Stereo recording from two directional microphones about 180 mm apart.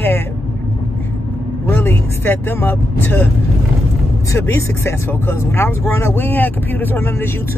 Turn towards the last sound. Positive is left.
turn(degrees=15)  # may be behind; listen again after turning